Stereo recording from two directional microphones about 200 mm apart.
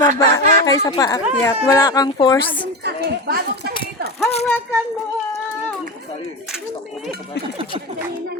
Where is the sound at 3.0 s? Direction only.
50° right (ahead or behind).